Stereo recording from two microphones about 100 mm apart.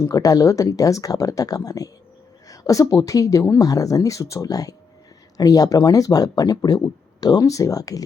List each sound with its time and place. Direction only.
0.0 s speech: 35° left (ahead or behind)